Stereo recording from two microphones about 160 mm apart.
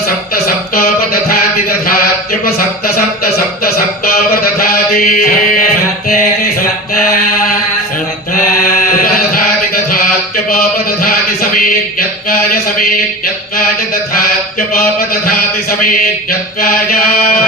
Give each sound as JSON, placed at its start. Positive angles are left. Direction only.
{"t": 0.4, "sound": "a sound", "side_deg": 70}
{"t": 2.4, "sound": "speech", "side_deg": 70}
{"t": 4.6, "sound": "mantra", "side_deg": 65}
{"t": 6.1, "sound": "music", "side_deg": 65}
{"t": 16.6, "sound": "speech", "side_deg": 70}